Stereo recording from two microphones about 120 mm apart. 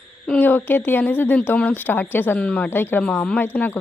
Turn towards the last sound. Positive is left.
turn(degrees=15)  # may be behind; listen again after turning